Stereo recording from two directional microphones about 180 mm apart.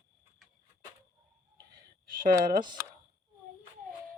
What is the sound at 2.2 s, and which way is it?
Speech, 50° right (ahead or behind).